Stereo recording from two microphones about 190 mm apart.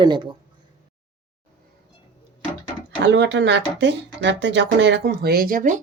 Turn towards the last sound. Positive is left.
turn(degrees=-45)  # may be behind; listen again after turning